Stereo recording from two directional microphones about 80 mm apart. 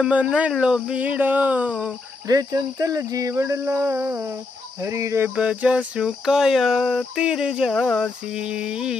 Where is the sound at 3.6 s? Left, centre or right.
Right.